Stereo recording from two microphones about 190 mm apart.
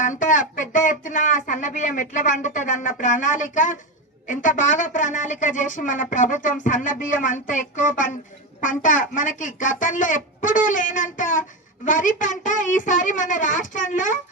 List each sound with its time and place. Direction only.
0.0 s speech: 40° left (ahead or behind)